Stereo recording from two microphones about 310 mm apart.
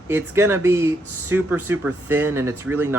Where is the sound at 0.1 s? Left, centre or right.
Centre.